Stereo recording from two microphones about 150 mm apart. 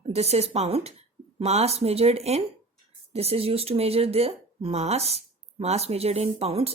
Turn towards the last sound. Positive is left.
turn(degrees=-40)  # may be behind; listen again after turning